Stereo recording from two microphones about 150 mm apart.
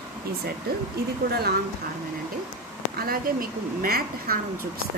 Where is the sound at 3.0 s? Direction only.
75° right (ahead or behind).